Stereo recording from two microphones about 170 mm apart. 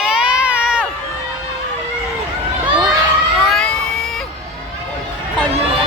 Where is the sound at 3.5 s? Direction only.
5° left (ahead or behind).